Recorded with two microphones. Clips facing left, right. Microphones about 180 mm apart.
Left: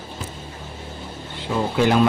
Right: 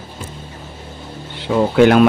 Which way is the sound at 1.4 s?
75° right (ahead or behind).